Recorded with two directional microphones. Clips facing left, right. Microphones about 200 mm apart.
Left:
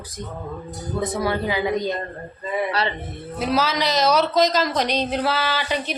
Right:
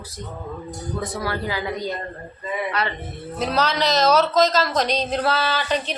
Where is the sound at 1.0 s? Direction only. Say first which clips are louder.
Left 5 dB; 20° left (ahead or behind).